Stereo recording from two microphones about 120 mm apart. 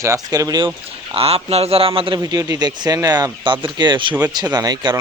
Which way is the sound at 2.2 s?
30° right (ahead or behind).